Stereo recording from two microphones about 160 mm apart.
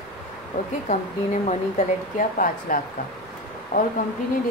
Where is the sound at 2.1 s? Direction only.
55° left (ahead or behind).